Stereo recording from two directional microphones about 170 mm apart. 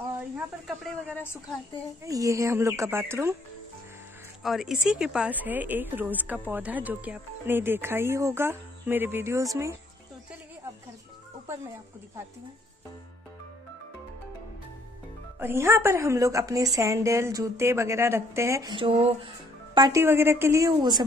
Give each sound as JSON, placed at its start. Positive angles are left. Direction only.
{"t": 0.7, "sound": "speech", "side_deg": 10}
{"t": 2.0, "sound": "a woman's voice", "side_deg": -20}
{"t": 4.4, "sound": "a woman's voice", "side_deg": 0}
{"t": 15.3, "sound": "a woman's voice", "side_deg": -15}